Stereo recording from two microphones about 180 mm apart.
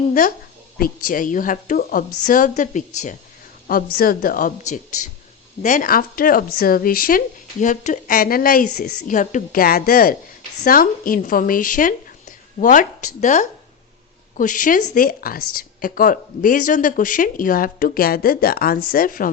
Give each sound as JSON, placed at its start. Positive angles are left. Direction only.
{"t": 0.1, "sound": "a woman's voice", "side_deg": 50}
{"t": 3.7, "sound": "a woman's voice", "side_deg": 55}